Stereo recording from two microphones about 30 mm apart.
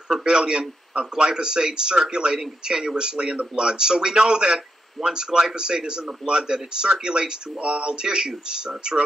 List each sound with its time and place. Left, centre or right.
0.2 s speech: right